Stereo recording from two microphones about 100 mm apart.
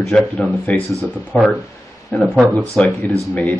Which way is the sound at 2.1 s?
20° left (ahead or behind).